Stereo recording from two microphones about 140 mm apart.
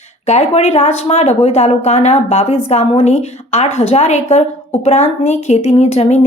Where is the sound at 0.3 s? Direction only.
50° left (ahead or behind).